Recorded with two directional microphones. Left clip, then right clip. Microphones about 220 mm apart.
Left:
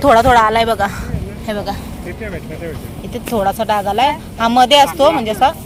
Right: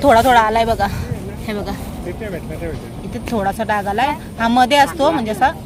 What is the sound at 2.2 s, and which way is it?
Speech, 40° left (ahead or behind).